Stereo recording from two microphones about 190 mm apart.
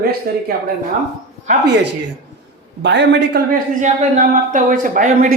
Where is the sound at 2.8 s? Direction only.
65° right (ahead or behind).